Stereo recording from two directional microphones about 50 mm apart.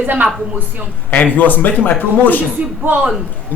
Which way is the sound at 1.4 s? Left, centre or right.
Left.